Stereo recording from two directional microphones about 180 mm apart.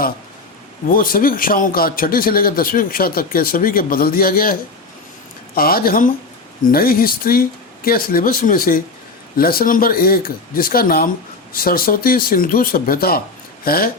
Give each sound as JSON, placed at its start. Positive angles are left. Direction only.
{"t": 0.9, "sound": "a man's voice", "side_deg": 50}
{"t": 5.5, "sound": "a man's voice", "side_deg": 55}